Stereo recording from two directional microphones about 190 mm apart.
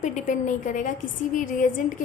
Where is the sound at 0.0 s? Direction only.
40° left (ahead or behind).